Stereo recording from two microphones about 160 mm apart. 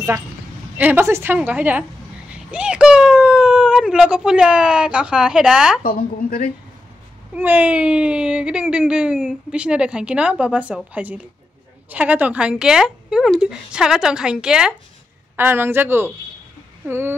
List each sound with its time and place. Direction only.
0.7 s speech: 10° right (ahead or behind)
5.9 s a woman's voice: 60° left (ahead or behind)
7.3 s a woman's voice: 10° right (ahead or behind)